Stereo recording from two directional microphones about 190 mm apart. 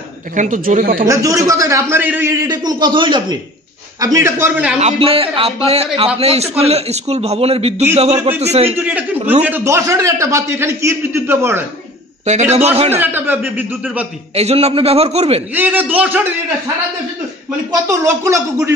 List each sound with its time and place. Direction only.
0.3 s speech: 45° right (ahead or behind)
1.0 s a man's voice: 15° right (ahead or behind)
4.7 s a man's voice: 35° right (ahead or behind)
8.7 s a man's voice: 10° right (ahead or behind)
12.5 s a man's voice: 35° right (ahead or behind)
12.9 s a man's voice: 10° right (ahead or behind)
14.3 s a man's voice: 35° right (ahead or behind)
15.5 s a man's voice: 10° right (ahead or behind)
17.6 s a man's voice: 15° right (ahead or behind)